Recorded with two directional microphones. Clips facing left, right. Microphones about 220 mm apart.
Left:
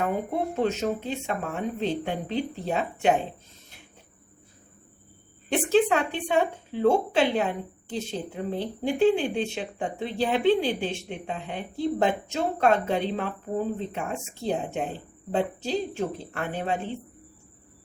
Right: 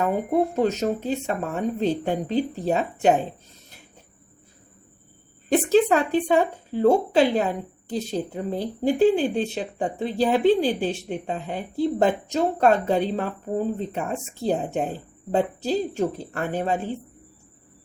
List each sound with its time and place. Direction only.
0.5 s speech: 40° right (ahead or behind)
5.5 s speech: 40° right (ahead or behind)